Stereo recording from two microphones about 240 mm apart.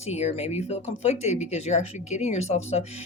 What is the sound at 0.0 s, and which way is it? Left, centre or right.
Speech, left.